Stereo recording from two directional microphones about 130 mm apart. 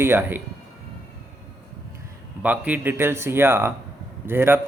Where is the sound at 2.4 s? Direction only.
10° right (ahead or behind).